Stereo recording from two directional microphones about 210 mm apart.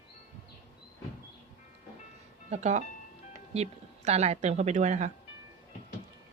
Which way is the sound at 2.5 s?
35° right (ahead or behind).